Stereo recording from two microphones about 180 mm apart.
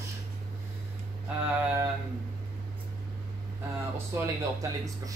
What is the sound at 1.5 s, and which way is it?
Speech, 10° right (ahead or behind).